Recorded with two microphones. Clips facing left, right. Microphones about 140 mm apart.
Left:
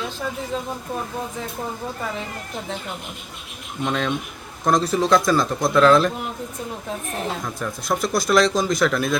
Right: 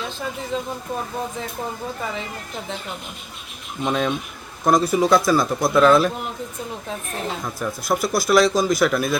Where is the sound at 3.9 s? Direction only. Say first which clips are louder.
Right 2 dB; 10° right (ahead or behind).